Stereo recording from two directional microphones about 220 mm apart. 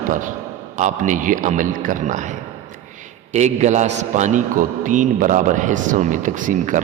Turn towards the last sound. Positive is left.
turn(degrees=-35)  # may be behind; listen again after turning